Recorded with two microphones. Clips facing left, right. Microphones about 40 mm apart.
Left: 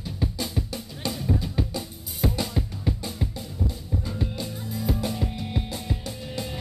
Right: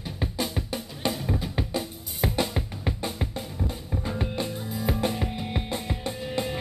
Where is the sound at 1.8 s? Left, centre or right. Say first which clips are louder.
Even; right.